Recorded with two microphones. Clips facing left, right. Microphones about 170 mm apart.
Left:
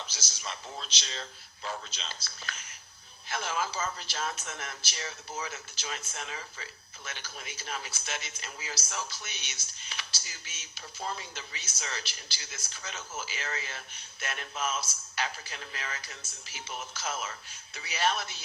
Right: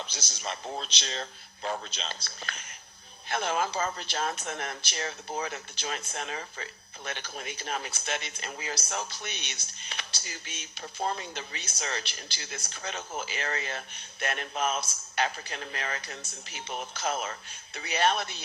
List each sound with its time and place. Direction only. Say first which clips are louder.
0.1 s speech: right 4 dB; 55° right (ahead or behind)